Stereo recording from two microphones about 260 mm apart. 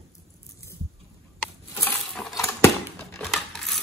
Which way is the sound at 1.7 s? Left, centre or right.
Centre.